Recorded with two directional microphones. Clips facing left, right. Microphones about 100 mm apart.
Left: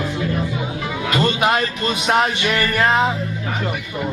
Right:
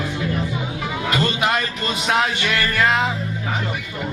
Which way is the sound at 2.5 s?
20° left (ahead or behind).